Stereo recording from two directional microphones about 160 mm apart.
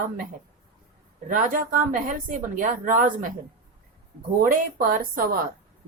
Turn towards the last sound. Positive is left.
turn(degrees=-60)  # may be behind; listen again after turning